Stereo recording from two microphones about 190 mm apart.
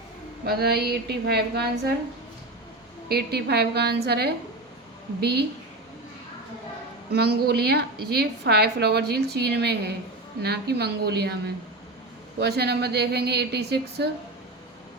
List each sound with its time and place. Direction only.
0.4 s a woman's voice: 55° right (ahead or behind)
3.1 s a woman's voice: 60° right (ahead or behind)
7.1 s a woman's voice: 55° right (ahead or behind)
12.4 s a woman's voice: 60° right (ahead or behind)